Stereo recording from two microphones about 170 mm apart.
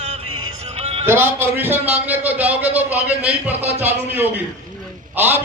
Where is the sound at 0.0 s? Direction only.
35° right (ahead or behind).